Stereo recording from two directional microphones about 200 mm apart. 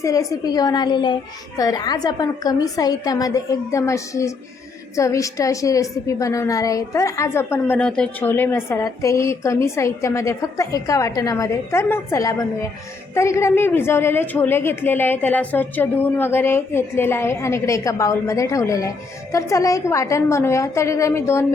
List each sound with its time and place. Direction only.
0.0 s a woman's voice: 15° left (ahead or behind)